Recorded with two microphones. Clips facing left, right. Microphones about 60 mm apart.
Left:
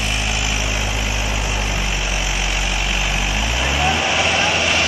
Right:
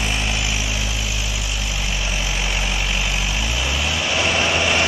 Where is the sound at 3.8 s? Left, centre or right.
Left.